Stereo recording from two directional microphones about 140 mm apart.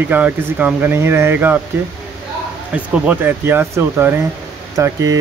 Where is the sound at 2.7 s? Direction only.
10° right (ahead or behind).